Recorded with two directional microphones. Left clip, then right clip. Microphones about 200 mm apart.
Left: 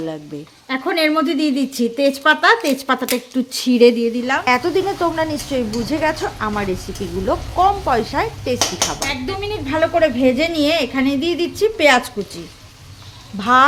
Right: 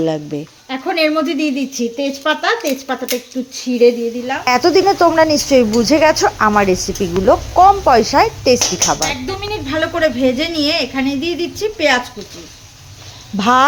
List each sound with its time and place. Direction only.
0.7 s a woman's voice: 10° left (ahead or behind)
4.4 s speech: 15° right (ahead or behind)
9.0 s a woman's voice: centre (ahead or behind); by 12.0 s 20° left (ahead or behind)
13.3 s speech: 25° right (ahead or behind)